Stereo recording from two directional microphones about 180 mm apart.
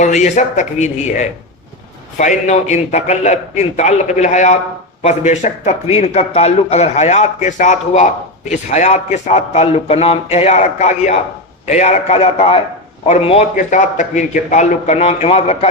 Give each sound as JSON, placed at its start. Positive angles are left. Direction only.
{"t": 0.0, "sound": "a man's voice", "side_deg": 40}